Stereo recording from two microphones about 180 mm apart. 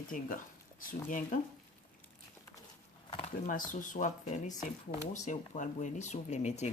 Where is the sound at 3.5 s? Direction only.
45° left (ahead or behind).